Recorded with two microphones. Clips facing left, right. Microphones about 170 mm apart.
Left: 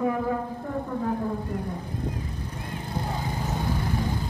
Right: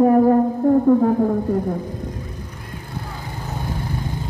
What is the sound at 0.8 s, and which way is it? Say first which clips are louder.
Speech: right 13 dB; 55° right (ahead or behind).